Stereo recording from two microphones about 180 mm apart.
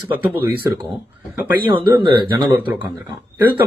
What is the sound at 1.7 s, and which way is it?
Speech, 30° right (ahead or behind).